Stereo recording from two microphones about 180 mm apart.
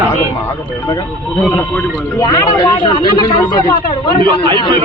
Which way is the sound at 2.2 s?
20° left (ahead or behind).